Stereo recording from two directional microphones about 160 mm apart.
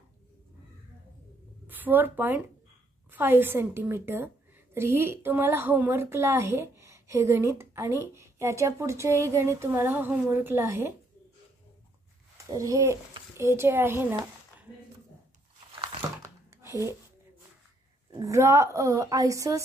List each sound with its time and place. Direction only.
1.7 s a woman's voice: 10° right (ahead or behind)
12.5 s a woman's voice: 20° right (ahead or behind)
16.2 s a sound: 20° right (ahead or behind)
18.2 s a woman's voice: 20° right (ahead or behind)